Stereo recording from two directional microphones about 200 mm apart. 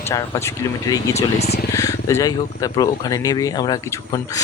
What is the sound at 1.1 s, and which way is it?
Speech, 30° left (ahead or behind).